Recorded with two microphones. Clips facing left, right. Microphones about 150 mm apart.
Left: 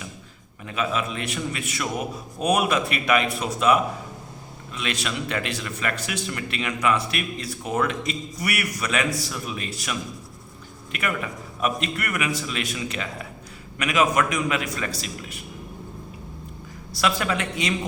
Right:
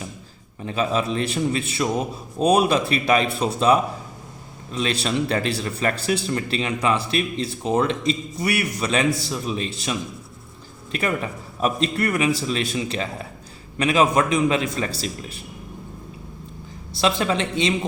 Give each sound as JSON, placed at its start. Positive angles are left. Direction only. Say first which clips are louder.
{"t": 0.6, "sound": "a man's voice", "louder": "right 4 dB", "side_deg": -30}
{"t": 16.9, "sound": "a man's voice", "louder": "right 3 dB", "side_deg": -25}